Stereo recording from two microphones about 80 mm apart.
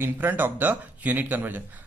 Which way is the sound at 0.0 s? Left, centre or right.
Right.